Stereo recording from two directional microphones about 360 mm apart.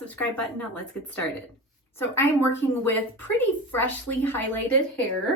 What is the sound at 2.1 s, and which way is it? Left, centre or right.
A woman's voice, centre.